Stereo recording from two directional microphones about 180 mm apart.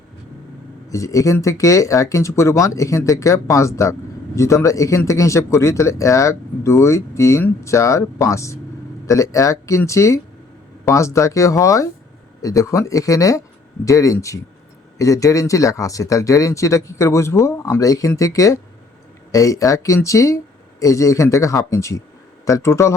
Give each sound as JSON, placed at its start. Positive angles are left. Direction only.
{"t": 0.9, "sound": "speech", "side_deg": 15}